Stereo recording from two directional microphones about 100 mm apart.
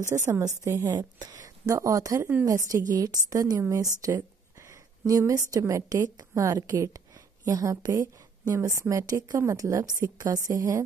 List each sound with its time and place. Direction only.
0.0 s a woman's voice: 30° right (ahead or behind)